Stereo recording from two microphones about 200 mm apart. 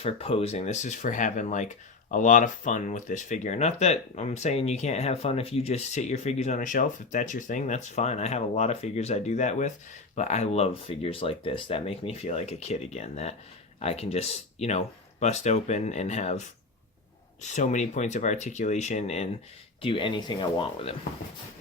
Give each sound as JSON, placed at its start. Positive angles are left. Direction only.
{"t": 0.0, "sound": "speech", "side_deg": 30}
{"t": 17.4, "sound": "speech", "side_deg": 35}